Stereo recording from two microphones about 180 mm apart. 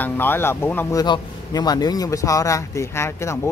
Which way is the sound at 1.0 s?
25° left (ahead or behind).